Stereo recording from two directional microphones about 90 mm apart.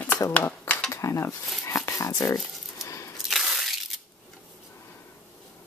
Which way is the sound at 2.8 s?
35° left (ahead or behind).